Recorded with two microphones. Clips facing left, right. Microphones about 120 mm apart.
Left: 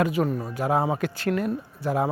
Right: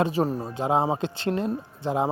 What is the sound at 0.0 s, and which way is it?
Speech, 30° right (ahead or behind).